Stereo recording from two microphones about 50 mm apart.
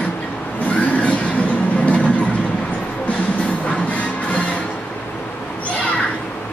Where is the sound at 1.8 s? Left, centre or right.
Left.